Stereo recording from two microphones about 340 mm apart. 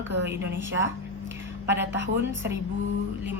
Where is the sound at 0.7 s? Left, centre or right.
Right.